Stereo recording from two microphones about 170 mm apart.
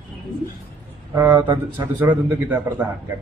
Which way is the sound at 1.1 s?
15° right (ahead or behind).